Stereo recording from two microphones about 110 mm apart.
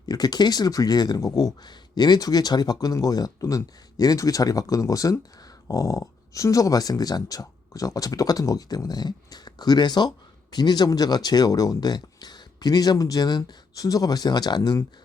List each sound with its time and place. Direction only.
0.0 s speech: 35° left (ahead or behind)